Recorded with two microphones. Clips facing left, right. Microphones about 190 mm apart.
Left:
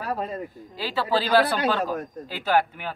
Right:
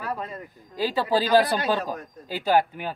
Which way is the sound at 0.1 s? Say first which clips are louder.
Left 5 dB; 35° left (ahead or behind).